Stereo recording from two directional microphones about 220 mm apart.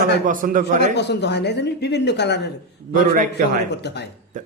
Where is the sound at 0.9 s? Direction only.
50° left (ahead or behind).